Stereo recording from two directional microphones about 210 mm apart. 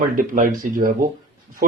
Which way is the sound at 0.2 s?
40° right (ahead or behind).